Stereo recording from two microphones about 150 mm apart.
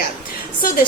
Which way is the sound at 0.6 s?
75° left (ahead or behind).